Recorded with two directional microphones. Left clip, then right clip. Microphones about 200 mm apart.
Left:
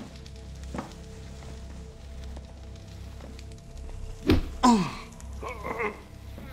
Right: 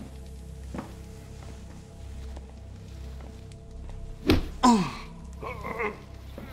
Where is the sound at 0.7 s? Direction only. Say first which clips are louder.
Left 2 dB; 10° left (ahead or behind).